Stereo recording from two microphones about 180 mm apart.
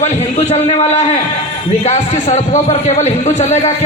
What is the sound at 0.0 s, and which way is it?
A man's voice, 35° left (ahead or behind).